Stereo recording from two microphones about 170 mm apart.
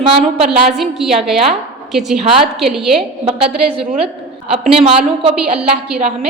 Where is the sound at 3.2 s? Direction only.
35° right (ahead or behind).